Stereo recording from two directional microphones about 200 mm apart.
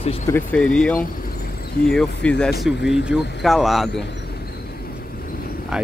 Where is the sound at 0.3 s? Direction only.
10° left (ahead or behind).